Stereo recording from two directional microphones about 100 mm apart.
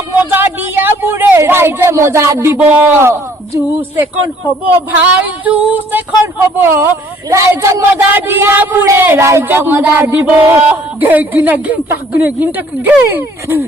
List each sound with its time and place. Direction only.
0.3 s a man's voice: 20° right (ahead or behind)